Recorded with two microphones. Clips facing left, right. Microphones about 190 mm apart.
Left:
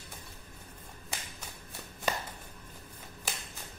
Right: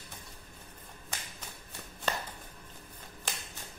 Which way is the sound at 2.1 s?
10° left (ahead or behind).